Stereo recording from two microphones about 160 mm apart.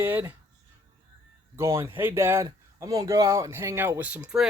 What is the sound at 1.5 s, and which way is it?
Speech, 15° right (ahead or behind).